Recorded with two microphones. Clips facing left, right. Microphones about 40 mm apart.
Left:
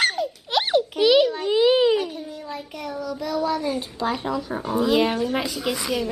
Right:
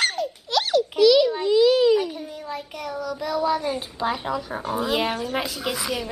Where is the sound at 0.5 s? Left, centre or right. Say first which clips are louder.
Even; left.